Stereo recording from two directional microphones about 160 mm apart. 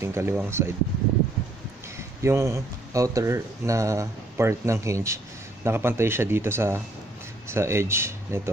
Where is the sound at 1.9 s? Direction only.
15° right (ahead or behind).